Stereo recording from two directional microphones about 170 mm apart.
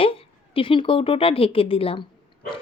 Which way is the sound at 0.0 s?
35° left (ahead or behind).